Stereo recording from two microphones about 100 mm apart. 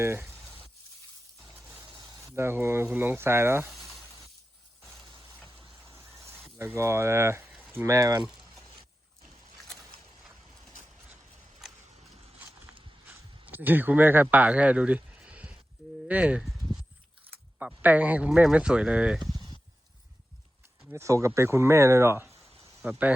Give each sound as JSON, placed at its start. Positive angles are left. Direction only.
{"t": 0.0, "sound": "speech", "side_deg": -25}
{"t": 2.2, "sound": "speech", "side_deg": -25}
{"t": 3.7, "sound": "frying", "side_deg": 0}
{"t": 4.9, "sound": "a sound", "side_deg": 0}
{"t": 5.7, "sound": "vehicle", "side_deg": -25}
{"t": 6.7, "sound": "speech", "side_deg": -30}
{"t": 7.6, "sound": "a sound", "side_deg": -20}
{"t": 7.9, "sound": "speech", "side_deg": -35}
{"t": 8.3, "sound": "a sound", "side_deg": -5}
{"t": 13.5, "sound": "speech", "side_deg": -20}
{"t": 17.8, "sound": "speech", "side_deg": -15}
{"t": 20.9, "sound": "speech", "side_deg": -30}
{"t": 22.9, "sound": "speech", "side_deg": -15}